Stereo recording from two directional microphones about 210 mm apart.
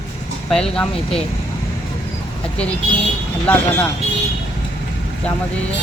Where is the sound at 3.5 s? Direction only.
10° left (ahead or behind).